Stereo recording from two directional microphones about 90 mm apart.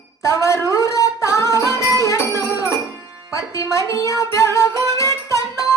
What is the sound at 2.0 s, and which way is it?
Music, 35° left (ahead or behind).